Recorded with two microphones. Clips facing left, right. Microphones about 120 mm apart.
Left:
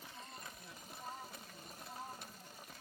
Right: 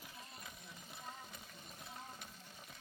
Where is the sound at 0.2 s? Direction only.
Centre (ahead or behind).